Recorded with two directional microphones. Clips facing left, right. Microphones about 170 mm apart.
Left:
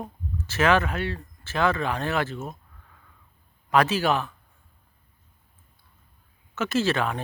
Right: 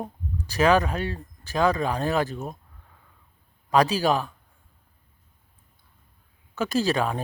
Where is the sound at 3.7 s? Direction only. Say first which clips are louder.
Right 1 dB; 35° right (ahead or behind).